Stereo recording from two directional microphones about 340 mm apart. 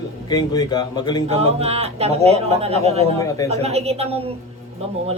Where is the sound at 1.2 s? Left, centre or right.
Centre.